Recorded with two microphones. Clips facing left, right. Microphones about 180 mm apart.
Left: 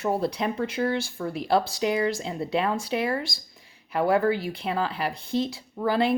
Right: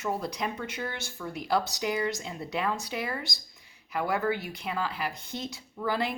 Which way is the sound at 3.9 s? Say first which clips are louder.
Left 6 dB; 30° left (ahead or behind).